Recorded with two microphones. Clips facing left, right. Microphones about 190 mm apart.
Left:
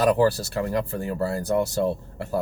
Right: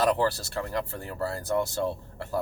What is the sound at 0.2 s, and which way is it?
Speech, 15° left (ahead or behind).